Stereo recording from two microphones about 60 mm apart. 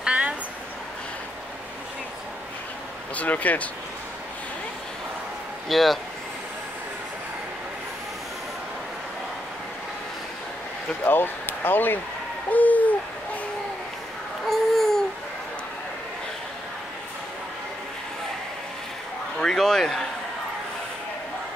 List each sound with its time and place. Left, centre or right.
0.0 s a sound: centre
3.2 s speech: left
5.7 s speech: centre
11.1 s speech: left
12.4 s hoot: left
14.5 s babbling: centre
19.3 s speech: centre